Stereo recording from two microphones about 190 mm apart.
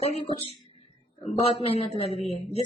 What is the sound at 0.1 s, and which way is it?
Speech, 30° left (ahead or behind).